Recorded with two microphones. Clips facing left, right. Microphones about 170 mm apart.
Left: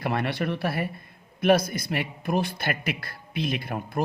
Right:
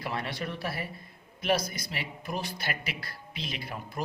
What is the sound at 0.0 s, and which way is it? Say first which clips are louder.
Speech: left 7 dB; 60° left (ahead or behind).